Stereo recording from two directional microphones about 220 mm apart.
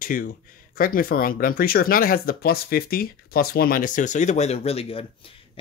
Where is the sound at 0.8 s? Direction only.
40° left (ahead or behind).